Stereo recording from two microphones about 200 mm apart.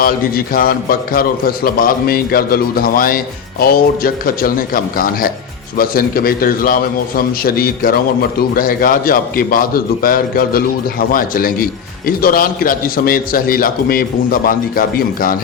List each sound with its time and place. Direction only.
0.0 s a man's voice: 45° left (ahead or behind)